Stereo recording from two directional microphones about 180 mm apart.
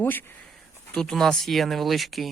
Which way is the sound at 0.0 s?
10° left (ahead or behind).